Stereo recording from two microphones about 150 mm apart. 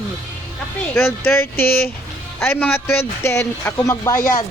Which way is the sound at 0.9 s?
15° left (ahead or behind).